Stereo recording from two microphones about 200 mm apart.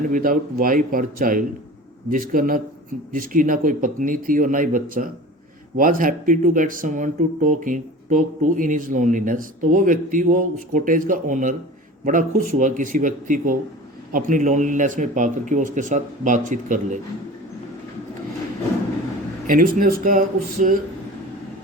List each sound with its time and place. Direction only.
0.1 s speech: 45° right (ahead or behind)
19.5 s speech: 45° right (ahead or behind)